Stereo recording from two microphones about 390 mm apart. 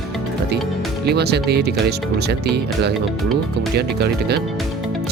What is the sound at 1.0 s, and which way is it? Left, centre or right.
Speech, right.